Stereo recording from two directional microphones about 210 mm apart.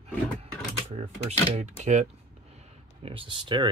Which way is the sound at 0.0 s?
30° right (ahead or behind).